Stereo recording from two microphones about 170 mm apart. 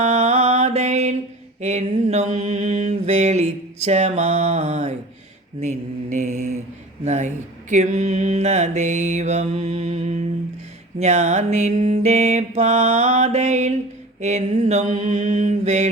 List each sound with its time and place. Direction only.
0.0 s mantra: 40° right (ahead or behind)